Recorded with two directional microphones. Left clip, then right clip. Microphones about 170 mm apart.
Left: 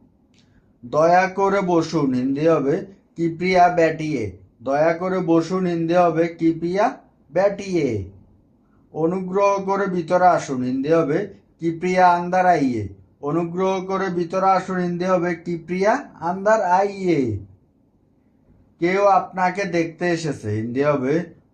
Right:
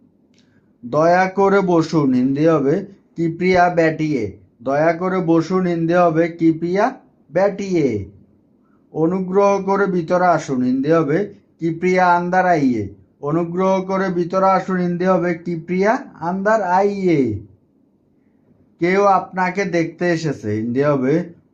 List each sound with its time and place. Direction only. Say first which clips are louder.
0.9 s a man's voice: right 1 dB; 50° right (ahead or behind)
18.8 s a man's voice: right 2 dB; 50° right (ahead or behind)